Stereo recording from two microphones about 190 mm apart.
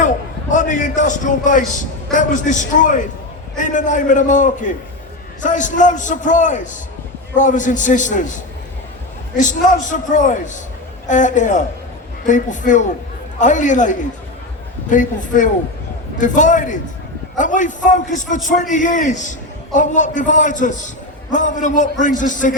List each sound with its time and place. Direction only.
0.5 s a man's voice: 40° left (ahead or behind)
9.4 s a man's voice: 40° left (ahead or behind)